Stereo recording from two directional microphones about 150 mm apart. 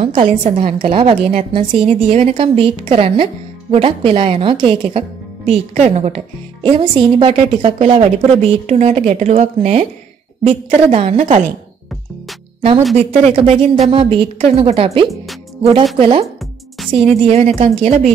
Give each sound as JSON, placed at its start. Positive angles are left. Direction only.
{"t": 0.4, "sound": "a woman's voice", "side_deg": -40}
{"t": 6.6, "sound": "a woman's voice", "side_deg": -35}
{"t": 11.1, "sound": "speech", "side_deg": -50}
{"t": 13.2, "sound": "a woman's voice", "side_deg": -40}